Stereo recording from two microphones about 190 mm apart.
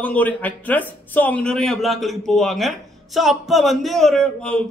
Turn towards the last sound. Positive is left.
turn(degrees=5)  # may be behind; listen again after turning